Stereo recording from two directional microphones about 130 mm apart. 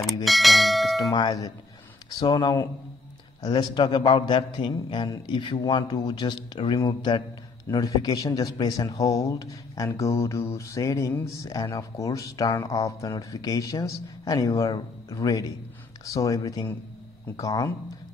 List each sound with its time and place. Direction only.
0.0 s bell: centre (ahead or behind)
1.1 s speech: 30° left (ahead or behind)
3.4 s a man's voice: 40° left (ahead or behind)